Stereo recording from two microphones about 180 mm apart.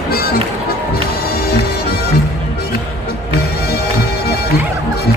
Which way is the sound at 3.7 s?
60° left (ahead or behind).